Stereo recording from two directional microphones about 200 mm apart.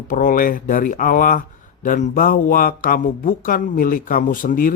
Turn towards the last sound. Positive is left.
turn(degrees=45)  # may be behind; listen again after turning